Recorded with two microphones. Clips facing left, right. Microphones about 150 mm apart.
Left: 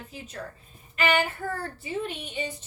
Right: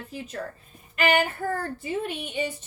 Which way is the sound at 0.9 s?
45° right (ahead or behind).